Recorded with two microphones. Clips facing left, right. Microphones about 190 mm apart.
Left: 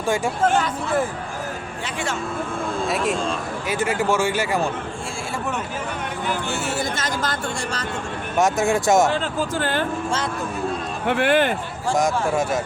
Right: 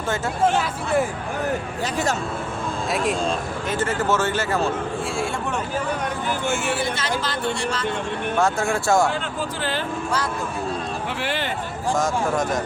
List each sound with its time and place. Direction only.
2.9 s speech: centre (ahead or behind)
3.7 s speech: 10° left (ahead or behind)
7.0 s speech: 45° left (ahead or behind)
8.4 s speech: 15° left (ahead or behind)
9.6 s speech: 50° left (ahead or behind)
11.1 s speech: 55° left (ahead or behind)
11.9 s speech: 15° left (ahead or behind)